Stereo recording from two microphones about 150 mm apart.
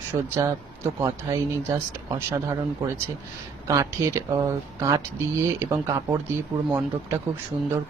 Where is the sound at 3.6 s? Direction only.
20° right (ahead or behind).